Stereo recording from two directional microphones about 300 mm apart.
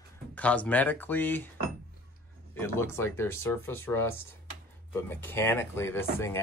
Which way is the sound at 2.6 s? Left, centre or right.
Centre.